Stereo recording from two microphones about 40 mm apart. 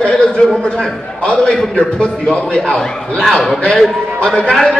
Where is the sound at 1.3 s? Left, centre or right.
Left.